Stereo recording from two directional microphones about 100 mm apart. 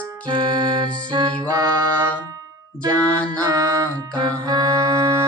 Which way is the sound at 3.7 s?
40° right (ahead or behind).